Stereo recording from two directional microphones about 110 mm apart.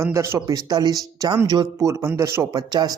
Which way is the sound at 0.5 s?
35° right (ahead or behind).